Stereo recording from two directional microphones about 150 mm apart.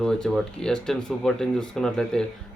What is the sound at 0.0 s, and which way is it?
Speech, 5° left (ahead or behind).